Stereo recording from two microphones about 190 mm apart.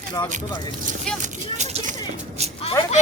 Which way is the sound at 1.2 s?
35° right (ahead or behind).